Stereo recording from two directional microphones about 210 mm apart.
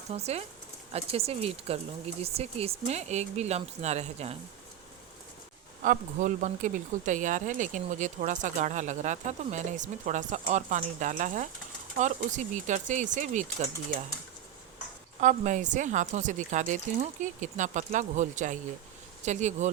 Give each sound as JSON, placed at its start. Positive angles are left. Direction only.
{"t": 0.1, "sound": "speech", "side_deg": -30}
{"t": 5.8, "sound": "speech", "side_deg": -35}
{"t": 15.2, "sound": "speech", "side_deg": -35}